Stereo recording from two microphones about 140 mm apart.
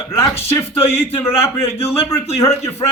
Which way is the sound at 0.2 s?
45° left (ahead or behind).